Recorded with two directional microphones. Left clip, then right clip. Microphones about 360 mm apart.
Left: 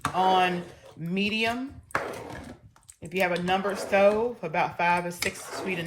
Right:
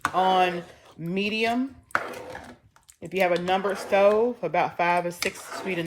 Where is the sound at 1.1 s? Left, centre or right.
Right.